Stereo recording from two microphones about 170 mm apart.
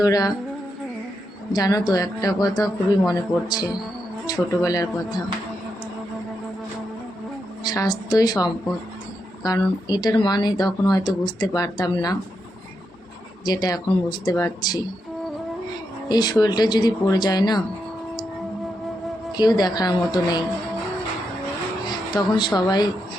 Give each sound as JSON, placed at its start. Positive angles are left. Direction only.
{"t": 0.0, "sound": "speech", "side_deg": 20}
{"t": 1.5, "sound": "speech", "side_deg": 20}
{"t": 7.6, "sound": "speech", "side_deg": 25}
{"t": 13.4, "sound": "speech", "side_deg": 25}
{"t": 16.0, "sound": "speech", "side_deg": 25}
{"t": 19.4, "sound": "speech", "side_deg": 25}
{"t": 22.1, "sound": "speech", "side_deg": 25}